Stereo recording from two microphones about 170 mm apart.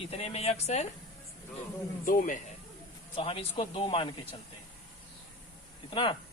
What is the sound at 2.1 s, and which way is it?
Speech, 50° left (ahead or behind).